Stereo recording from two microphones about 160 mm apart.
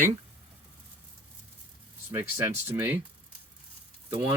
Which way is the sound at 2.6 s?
15° right (ahead or behind).